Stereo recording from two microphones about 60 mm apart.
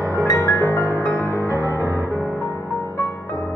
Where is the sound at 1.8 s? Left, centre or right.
Right.